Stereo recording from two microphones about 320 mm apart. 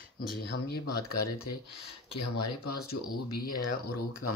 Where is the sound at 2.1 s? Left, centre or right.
Left.